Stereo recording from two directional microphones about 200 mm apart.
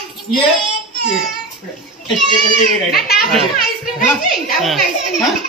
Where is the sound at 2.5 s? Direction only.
50° left (ahead or behind).